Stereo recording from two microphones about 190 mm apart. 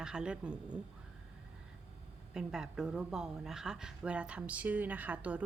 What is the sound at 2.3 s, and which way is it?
A woman's voice, 5° right (ahead or behind).